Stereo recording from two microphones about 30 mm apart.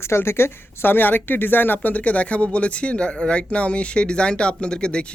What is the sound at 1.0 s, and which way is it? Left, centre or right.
Speech, left.